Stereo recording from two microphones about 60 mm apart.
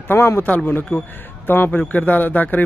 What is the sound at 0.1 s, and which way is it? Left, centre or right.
Speech, left.